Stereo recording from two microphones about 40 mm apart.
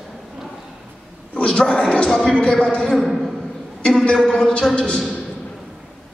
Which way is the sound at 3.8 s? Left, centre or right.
Left.